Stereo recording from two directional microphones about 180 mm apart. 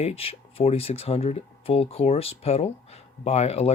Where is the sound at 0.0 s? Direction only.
35° left (ahead or behind).